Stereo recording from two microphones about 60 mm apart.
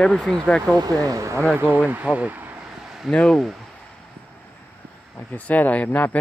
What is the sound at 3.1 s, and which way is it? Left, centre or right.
Speech, centre.